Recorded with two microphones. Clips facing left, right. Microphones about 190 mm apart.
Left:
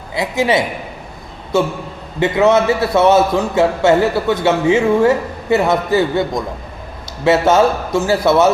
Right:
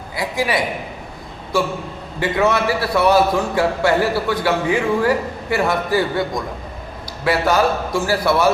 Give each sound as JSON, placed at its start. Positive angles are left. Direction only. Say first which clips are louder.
{"t": 0.1, "sound": "a man's voice", "louder": "left 5 dB", "side_deg": 25}